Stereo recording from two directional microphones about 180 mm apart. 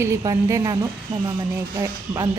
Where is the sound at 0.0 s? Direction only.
20° right (ahead or behind).